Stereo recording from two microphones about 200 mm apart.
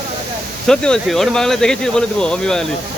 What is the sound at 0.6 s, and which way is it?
Speech, 5° left (ahead or behind).